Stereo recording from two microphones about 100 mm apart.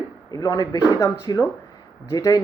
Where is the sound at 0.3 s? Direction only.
40° left (ahead or behind).